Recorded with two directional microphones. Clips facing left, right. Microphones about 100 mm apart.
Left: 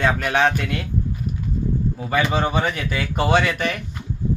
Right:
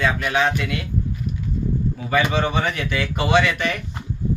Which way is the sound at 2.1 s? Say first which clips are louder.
Right 1 dB; 30° left (ahead or behind).